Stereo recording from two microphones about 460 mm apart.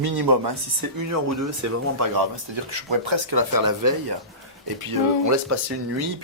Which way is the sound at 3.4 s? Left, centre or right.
Right.